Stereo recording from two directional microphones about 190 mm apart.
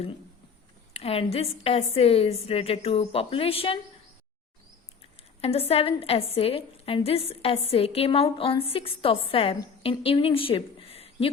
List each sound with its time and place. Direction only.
0.9 s a woman's voice: 30° left (ahead or behind)
5.4 s a woman's voice: 30° left (ahead or behind)